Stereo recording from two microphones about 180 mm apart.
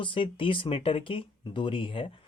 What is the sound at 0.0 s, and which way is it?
Speech, 30° left (ahead or behind).